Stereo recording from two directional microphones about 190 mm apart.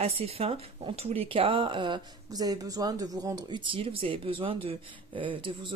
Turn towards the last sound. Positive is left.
turn(degrees=-25)  # may be behind; listen again after turning